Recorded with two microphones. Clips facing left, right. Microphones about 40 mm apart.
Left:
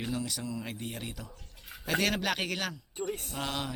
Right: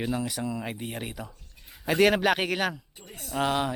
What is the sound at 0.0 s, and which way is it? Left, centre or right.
Speech, right.